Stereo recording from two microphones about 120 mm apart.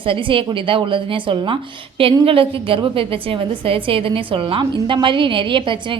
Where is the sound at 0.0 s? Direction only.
45° right (ahead or behind).